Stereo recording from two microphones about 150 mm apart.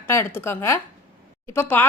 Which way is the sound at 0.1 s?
15° left (ahead or behind).